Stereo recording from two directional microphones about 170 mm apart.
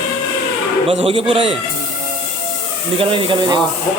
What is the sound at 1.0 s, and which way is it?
Speech, 30° right (ahead or behind).